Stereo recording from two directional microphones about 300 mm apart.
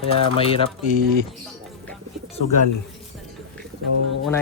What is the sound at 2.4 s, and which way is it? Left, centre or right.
Speech, left.